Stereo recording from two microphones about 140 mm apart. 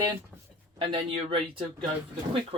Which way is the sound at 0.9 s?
40° right (ahead or behind).